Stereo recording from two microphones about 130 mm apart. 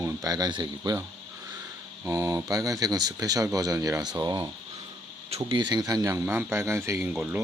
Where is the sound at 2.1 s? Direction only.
25° right (ahead or behind).